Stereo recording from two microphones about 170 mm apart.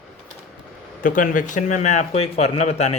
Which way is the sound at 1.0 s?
55° left (ahead or behind).